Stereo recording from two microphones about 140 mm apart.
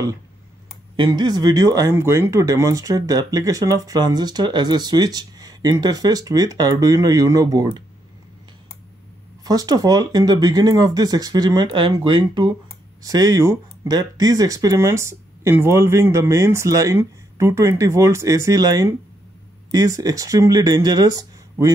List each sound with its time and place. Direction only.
0.9 s speech: 35° right (ahead or behind)
9.4 s speech: 25° right (ahead or behind)
13.0 s speech: 25° right (ahead or behind)